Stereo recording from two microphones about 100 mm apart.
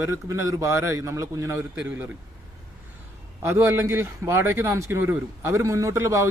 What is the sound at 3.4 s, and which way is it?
Speech, 25° right (ahead or behind).